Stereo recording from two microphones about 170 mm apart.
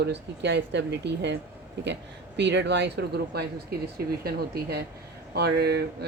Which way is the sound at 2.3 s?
90° right.